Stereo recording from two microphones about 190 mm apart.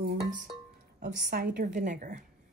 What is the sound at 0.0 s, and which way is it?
Music, 55° right (ahead or behind).